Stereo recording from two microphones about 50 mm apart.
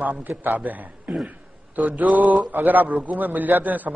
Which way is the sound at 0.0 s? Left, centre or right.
Right.